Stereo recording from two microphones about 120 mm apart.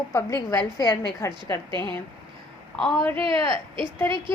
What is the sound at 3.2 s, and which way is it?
Speech, 45° right (ahead or behind).